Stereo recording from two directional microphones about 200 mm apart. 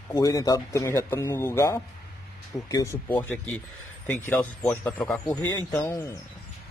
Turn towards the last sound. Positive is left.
turn(degrees=15)  # may be behind; listen again after turning